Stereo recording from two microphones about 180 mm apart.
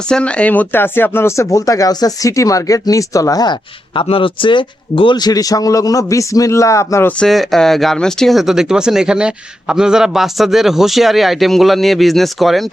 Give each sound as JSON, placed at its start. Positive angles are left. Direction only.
{"t": 0.1, "sound": "speech", "side_deg": 5}
{"t": 7.2, "sound": "speech", "side_deg": 0}